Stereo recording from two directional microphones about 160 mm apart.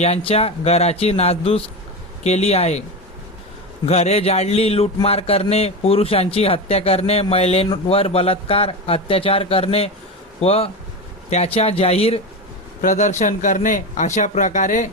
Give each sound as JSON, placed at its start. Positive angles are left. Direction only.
{"t": 0.0, "sound": "a man's voice", "side_deg": 40}
{"t": 3.8, "sound": "a man's voice", "side_deg": 40}
{"t": 12.8, "sound": "speech", "side_deg": 50}